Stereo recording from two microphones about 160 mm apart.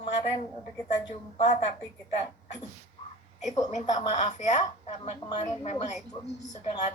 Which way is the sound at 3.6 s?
45° left (ahead or behind).